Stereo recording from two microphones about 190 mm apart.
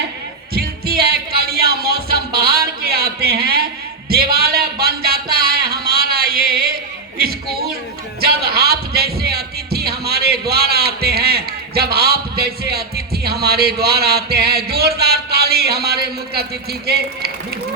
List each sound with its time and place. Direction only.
0.5 s music: 55° right (ahead or behind)
4.1 s a sound: 55° right (ahead or behind)
8.2 s music: 55° right (ahead or behind)
13.2 s speech: 55° right (ahead or behind)